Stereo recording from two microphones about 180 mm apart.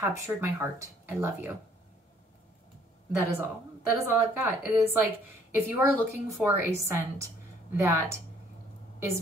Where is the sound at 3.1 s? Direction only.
10° right (ahead or behind).